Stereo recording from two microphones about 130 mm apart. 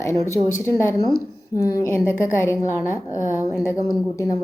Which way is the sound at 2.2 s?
20° left (ahead or behind).